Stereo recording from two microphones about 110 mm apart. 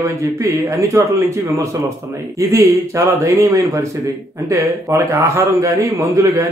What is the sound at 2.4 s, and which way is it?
A man's voice, 30° right (ahead or behind).